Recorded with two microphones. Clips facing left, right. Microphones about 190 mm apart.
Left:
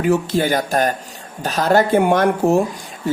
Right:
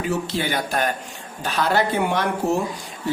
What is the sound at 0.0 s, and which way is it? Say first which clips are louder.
Speech: left 7 dB; 45° left (ahead or behind).